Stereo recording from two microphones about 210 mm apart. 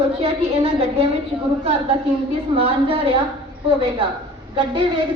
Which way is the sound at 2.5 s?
25° right (ahead or behind).